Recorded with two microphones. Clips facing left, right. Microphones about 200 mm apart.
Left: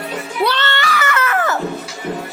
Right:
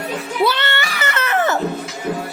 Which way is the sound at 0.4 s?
15° right (ahead or behind).